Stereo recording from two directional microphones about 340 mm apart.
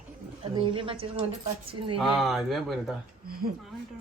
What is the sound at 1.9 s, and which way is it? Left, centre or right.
Speech, centre.